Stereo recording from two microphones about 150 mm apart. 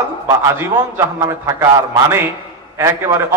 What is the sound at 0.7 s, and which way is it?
A man's voice, 20° right (ahead or behind).